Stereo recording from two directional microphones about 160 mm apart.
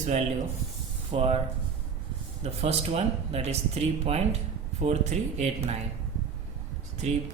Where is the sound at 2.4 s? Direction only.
40° right (ahead or behind).